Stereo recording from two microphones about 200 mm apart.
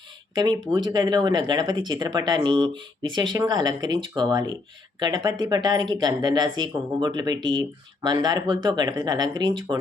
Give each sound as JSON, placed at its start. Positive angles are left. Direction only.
{"t": 0.3, "sound": "speech", "side_deg": -20}